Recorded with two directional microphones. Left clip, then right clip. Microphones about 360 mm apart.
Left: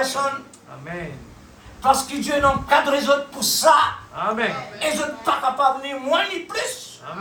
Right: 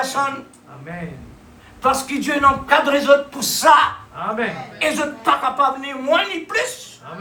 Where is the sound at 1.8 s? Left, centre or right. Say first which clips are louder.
Even; right.